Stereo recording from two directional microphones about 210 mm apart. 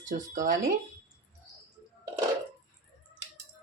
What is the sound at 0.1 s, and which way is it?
Speech, 40° right (ahead or behind).